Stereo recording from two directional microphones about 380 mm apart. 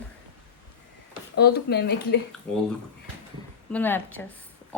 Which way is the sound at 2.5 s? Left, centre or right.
Centre.